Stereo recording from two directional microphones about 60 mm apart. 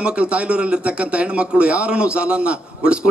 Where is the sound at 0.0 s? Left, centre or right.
Centre.